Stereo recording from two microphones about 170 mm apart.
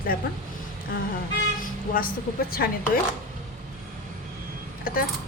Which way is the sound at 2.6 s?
70° left (ahead or behind).